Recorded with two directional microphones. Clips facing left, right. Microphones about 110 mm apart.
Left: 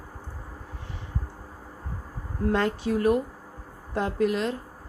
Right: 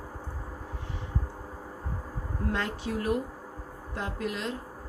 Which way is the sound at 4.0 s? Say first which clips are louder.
Left 9 dB; 50° left (ahead or behind).